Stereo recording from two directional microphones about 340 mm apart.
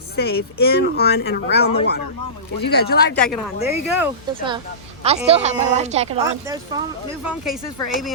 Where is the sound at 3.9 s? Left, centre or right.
Centre.